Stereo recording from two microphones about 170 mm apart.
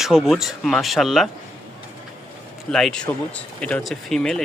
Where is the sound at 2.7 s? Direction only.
5° left (ahead or behind).